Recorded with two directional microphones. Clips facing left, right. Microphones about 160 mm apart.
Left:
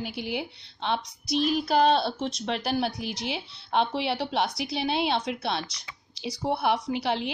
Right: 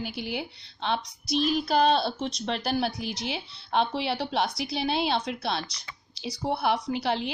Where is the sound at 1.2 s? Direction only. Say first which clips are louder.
Even; 50° left (ahead or behind).